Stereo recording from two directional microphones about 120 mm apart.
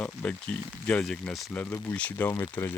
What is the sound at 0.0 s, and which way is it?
Speech, 10° left (ahead or behind).